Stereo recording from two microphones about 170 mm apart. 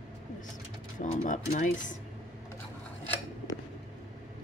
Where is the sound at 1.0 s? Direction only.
50° left (ahead or behind).